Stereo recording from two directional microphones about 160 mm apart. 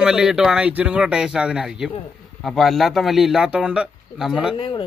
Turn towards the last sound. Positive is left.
turn(degrees=30)  # may be behind; listen again after turning